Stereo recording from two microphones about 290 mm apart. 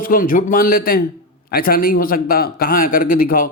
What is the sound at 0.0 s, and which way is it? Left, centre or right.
A man's voice, left.